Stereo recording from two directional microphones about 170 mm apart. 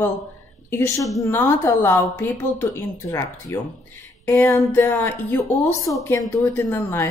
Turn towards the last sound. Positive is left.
turn(degrees=15)  # may be behind; listen again after turning